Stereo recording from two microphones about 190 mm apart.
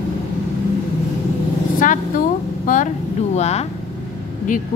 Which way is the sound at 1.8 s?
45° left (ahead or behind).